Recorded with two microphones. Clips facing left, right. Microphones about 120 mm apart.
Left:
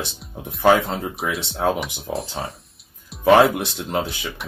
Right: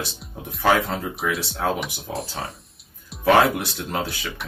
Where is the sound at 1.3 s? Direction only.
25° left (ahead or behind).